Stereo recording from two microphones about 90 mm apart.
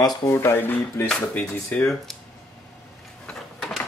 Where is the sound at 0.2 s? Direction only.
30° left (ahead or behind).